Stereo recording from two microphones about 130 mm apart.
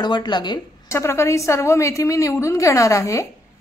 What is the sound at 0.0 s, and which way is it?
Speech, 35° left (ahead or behind).